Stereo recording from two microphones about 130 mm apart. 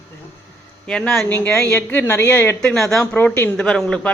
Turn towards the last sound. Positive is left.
turn(degrees=5)  # may be behind; listen again after turning